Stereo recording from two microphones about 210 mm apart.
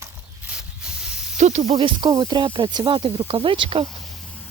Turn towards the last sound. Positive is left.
turn(degrees=-25)  # may be behind; listen again after turning